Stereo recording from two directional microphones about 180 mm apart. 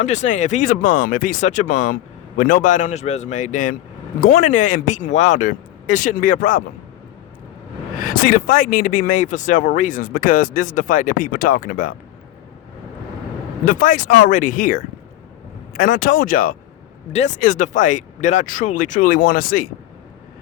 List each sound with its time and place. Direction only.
0.0 s speech: 40° left (ahead or behind)
8.0 s speech: 50° left (ahead or behind)
13.7 s speech: 50° left (ahead or behind)